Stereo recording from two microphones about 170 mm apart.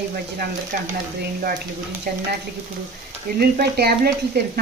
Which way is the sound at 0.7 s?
60° right (ahead or behind).